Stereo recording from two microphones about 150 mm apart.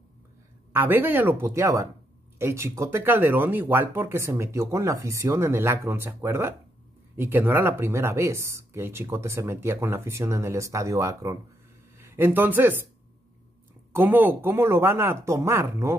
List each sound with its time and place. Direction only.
0.7 s speech: 15° right (ahead or behind)
13.9 s speech: 15° right (ahead or behind)